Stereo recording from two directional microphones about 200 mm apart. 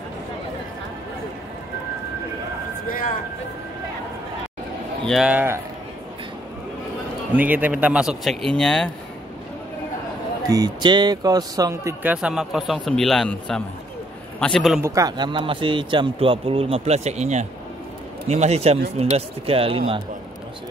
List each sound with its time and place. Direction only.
5.0 s speech: centre (ahead or behind)
7.3 s speech: 10° right (ahead or behind)
10.5 s speech: 20° right (ahead or behind); by 14.8 s centre (ahead or behind)
14.8 s a man's voice: 15° right (ahead or behind)